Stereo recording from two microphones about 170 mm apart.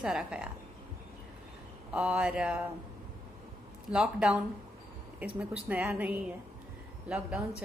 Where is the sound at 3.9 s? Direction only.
5° right (ahead or behind).